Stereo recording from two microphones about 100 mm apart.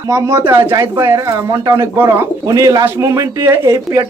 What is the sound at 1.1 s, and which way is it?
Speech, 35° right (ahead or behind).